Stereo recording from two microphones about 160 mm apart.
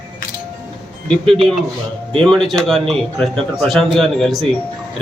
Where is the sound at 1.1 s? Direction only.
Centre (ahead or behind).